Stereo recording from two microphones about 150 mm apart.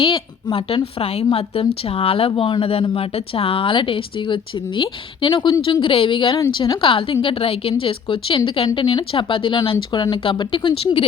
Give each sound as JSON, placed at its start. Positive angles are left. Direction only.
{"t": 0.0, "sound": "a woman's voice", "side_deg": 35}